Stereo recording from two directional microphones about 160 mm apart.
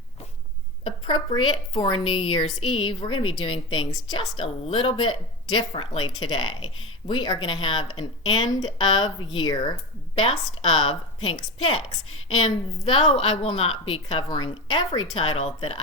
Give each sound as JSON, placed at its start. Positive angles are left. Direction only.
{"t": 1.0, "sound": "a woman's voice", "side_deg": 30}
{"t": 10.2, "sound": "a woman's voice", "side_deg": 35}
{"t": 12.4, "sound": "a woman's voice", "side_deg": 35}